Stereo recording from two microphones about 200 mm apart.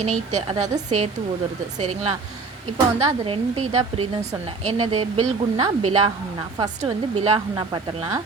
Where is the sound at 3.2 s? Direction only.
25° right (ahead or behind).